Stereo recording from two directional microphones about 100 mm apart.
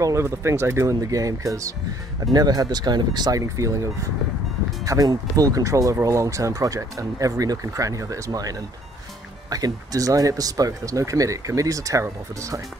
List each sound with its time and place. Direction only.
0.0 s speech: 30° right (ahead or behind)